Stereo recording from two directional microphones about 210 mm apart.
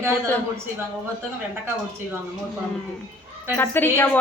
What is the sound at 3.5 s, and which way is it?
Speech, 10° left (ahead or behind).